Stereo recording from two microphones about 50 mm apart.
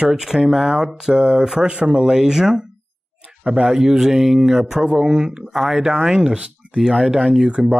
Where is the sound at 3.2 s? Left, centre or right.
Right.